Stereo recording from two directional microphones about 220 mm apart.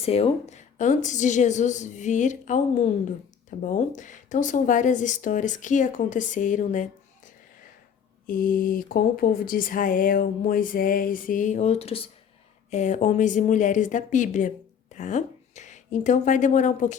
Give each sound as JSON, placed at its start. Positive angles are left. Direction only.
{"t": 0.0, "sound": "speech", "side_deg": 25}
{"t": 8.3, "sound": "speech", "side_deg": 40}